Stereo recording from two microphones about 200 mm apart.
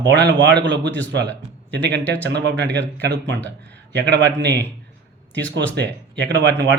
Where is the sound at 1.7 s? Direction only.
60° right (ahead or behind).